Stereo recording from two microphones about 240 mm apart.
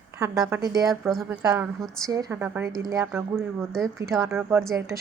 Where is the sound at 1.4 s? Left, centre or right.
Centre.